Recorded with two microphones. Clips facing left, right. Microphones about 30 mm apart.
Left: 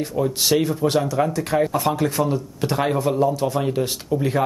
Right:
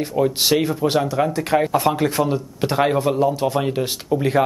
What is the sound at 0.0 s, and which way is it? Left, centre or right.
Speech, right.